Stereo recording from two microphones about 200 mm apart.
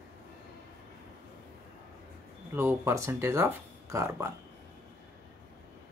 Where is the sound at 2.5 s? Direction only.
10° right (ahead or behind).